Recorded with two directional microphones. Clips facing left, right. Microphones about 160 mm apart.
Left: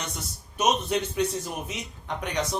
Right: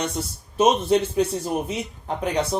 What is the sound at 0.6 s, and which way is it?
A man's voice, 30° right (ahead or behind).